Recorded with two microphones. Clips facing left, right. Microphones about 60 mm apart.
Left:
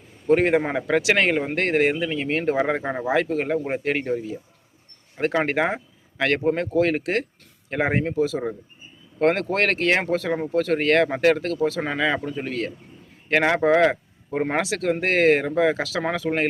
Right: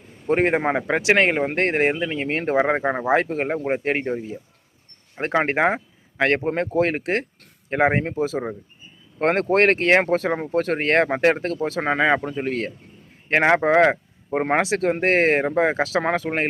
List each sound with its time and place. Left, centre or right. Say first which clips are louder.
0.3 s speech: left 1 dB; right
9.1 s speech: right 2 dB; right
12.3 s speech: right 2 dB; right